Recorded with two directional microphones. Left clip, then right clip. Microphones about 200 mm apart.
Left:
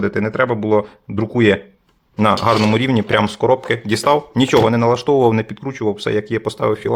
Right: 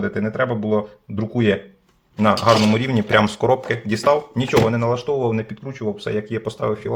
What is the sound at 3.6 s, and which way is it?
Speech, 25° left (ahead or behind).